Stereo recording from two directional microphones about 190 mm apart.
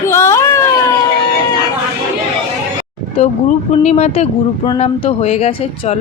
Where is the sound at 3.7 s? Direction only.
35° left (ahead or behind).